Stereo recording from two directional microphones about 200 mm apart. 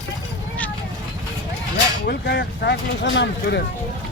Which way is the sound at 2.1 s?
55° left (ahead or behind).